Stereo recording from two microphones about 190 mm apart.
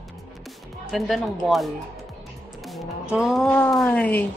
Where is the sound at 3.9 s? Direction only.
10° left (ahead or behind).